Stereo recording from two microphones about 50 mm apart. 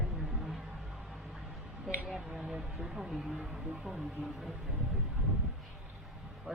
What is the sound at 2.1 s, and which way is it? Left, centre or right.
Speech, centre.